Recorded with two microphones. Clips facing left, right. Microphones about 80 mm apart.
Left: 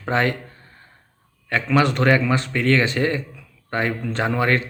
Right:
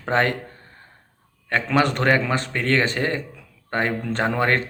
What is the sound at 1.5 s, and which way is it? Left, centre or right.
A man's voice, right.